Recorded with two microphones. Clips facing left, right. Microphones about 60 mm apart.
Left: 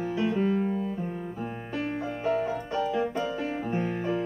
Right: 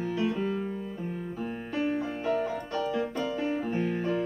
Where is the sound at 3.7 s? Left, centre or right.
Left.